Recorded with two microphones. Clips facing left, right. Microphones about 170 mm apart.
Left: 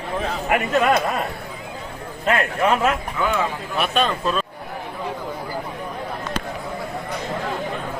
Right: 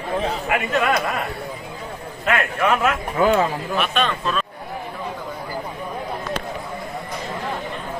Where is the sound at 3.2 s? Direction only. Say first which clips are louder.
Right 5 dB; 40° right (ahead or behind).